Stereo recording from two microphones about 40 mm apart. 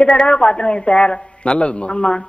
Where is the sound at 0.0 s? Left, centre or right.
Left.